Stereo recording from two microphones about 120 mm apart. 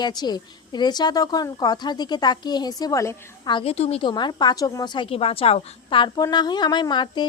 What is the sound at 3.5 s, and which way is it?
Speech, 55° left (ahead or behind).